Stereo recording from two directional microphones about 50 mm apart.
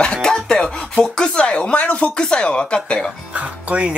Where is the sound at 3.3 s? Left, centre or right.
Right.